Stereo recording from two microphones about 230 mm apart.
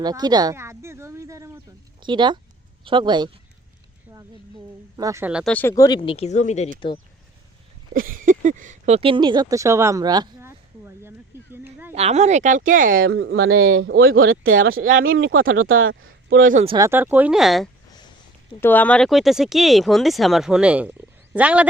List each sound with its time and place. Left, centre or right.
0.0 s a sound: centre
2.0 s speech: centre
4.9 s speech: centre
6.1 s speech: left
7.9 s speech: right; by 11.1 s centre
11.5 s a sound: centre
11.9 s speech: right
13.1 s speech: right
16.4 s speech: right
16.6 s speech: centre